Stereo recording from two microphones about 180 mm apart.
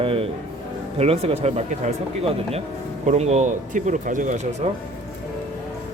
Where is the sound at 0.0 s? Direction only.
30° right (ahead or behind).